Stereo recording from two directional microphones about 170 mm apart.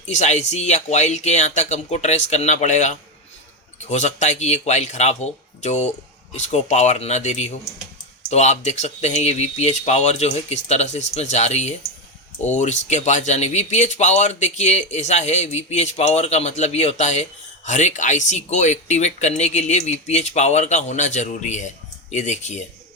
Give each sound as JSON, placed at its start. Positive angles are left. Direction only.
{"t": 0.0, "sound": "speech", "side_deg": 45}